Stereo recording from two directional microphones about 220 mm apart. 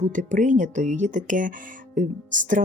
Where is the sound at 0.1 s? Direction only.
35° right (ahead or behind).